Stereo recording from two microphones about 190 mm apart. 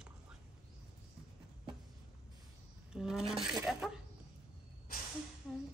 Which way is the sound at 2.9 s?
Centre (ahead or behind).